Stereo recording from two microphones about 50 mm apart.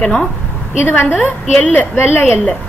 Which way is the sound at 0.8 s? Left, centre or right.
Left.